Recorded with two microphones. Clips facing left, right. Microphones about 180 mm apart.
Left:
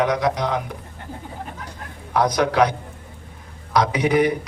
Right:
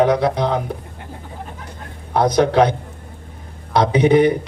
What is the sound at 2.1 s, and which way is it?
A man's voice, 30° right (ahead or behind).